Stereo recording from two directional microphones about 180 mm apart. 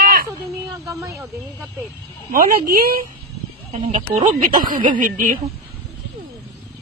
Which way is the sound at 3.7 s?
30° right (ahead or behind).